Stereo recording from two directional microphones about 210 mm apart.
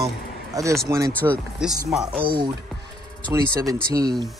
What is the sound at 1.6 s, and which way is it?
Chopping, centre (ahead or behind).